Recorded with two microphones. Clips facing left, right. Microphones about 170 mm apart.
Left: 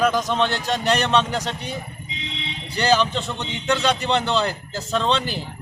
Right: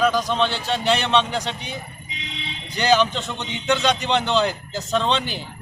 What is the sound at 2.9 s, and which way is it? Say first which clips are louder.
A man's voice: right 1 dB; centre (ahead or behind).